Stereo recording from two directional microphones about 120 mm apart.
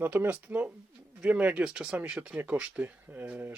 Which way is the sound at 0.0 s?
15° right (ahead or behind).